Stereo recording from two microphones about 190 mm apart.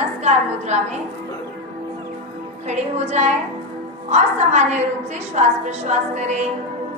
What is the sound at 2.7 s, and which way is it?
A woman's voice, 35° right (ahead or behind).